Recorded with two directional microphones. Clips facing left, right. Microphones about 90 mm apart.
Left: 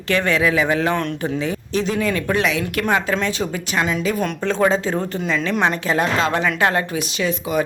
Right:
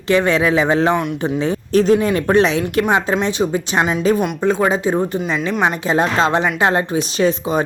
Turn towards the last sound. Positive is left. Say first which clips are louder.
# right 4 dB
turn(degrees=-35)  # may be behind; listen again after turning